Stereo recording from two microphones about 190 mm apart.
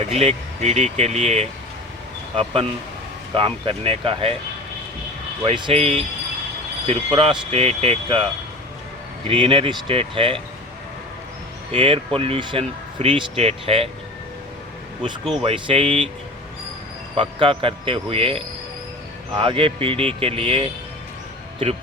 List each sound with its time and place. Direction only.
0.1 s speech: 35° right (ahead or behind)
5.5 s speech: 30° right (ahead or behind)
11.7 s speech: 30° right (ahead or behind)
15.4 s speech: 30° right (ahead or behind)
17.2 s speech: 30° right (ahead or behind)